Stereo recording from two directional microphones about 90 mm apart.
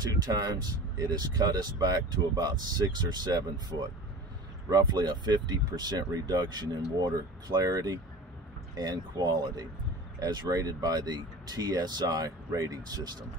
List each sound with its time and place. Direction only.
0.0 s speech: 45° right (ahead or behind)
4.6 s speech: 50° right (ahead or behind)